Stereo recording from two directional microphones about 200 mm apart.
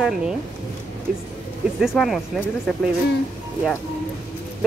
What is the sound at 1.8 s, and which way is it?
Speech, centre (ahead or behind).